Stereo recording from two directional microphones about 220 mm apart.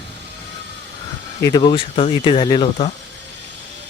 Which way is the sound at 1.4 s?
15° left (ahead or behind).